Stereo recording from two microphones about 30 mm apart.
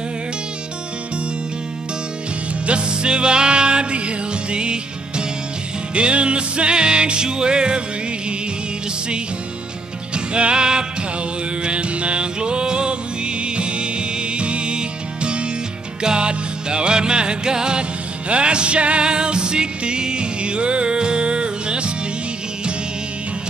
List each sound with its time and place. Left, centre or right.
2.6 s music: right
10.1 s music: right
11.6 s music: right
19.0 s music: right